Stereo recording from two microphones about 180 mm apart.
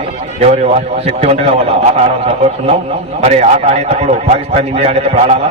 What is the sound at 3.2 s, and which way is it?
A man's voice, 40° right (ahead or behind).